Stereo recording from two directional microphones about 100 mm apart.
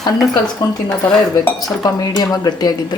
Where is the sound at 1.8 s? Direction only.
40° left (ahead or behind).